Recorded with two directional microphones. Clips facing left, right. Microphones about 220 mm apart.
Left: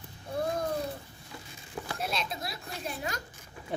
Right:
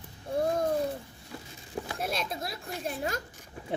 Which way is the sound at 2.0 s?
50° right (ahead or behind).